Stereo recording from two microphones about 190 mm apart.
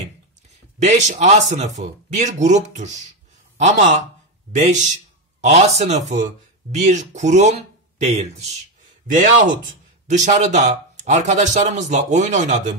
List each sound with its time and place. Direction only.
0.7 s a man's voice: 40° right (ahead or behind)
10.0 s speech: 40° right (ahead or behind)